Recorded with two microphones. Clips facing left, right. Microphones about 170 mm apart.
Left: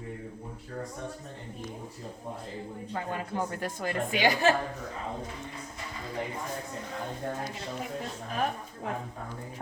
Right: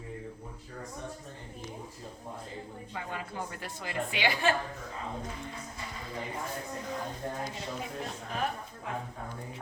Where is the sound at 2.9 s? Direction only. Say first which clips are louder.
Left 6 dB; 45° left (ahead or behind).